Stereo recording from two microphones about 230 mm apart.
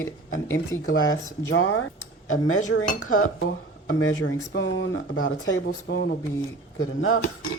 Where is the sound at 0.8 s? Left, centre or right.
Left.